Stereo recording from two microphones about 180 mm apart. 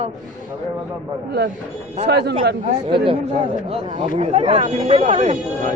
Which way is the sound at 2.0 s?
65° right (ahead or behind).